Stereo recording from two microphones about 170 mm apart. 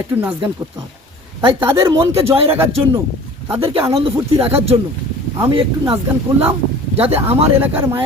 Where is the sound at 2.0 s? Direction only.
35° right (ahead or behind).